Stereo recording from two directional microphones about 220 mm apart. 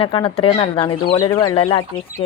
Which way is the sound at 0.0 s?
25° left (ahead or behind).